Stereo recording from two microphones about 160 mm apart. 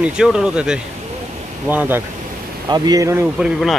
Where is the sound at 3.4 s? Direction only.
Centre (ahead or behind).